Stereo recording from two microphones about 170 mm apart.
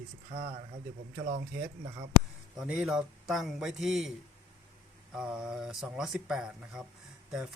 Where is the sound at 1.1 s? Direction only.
55° right (ahead or behind).